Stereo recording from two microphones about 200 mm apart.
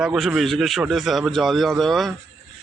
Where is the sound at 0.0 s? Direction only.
5° right (ahead or behind).